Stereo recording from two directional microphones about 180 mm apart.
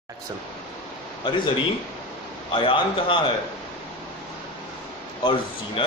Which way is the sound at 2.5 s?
30° left (ahead or behind).